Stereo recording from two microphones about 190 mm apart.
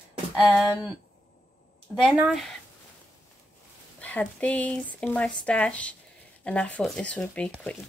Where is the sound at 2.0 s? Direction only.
5° right (ahead or behind).